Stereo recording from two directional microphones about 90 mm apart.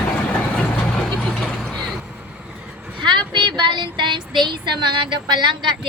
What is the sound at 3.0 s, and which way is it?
A woman's voice, 60° right (ahead or behind).